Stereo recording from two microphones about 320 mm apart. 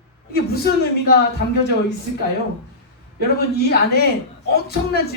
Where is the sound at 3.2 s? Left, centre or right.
Left.